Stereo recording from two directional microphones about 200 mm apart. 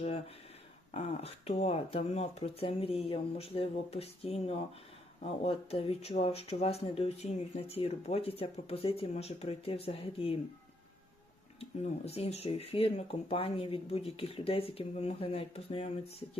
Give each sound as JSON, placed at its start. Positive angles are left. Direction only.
{"t": 0.9, "sound": "speech", "side_deg": 30}
{"t": 11.6, "sound": "speech", "side_deg": 30}